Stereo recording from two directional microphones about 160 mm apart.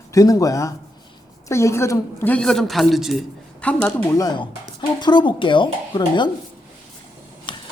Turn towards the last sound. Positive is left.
turn(degrees=30)  # may be behind; listen again after turning